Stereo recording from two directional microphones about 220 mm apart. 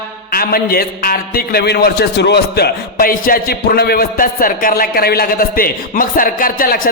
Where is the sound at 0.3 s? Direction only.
45° left (ahead or behind).